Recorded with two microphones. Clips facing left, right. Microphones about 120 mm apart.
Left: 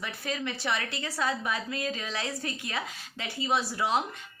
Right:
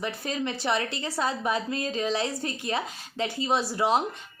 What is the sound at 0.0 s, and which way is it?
A woman's voice, 30° right (ahead or behind).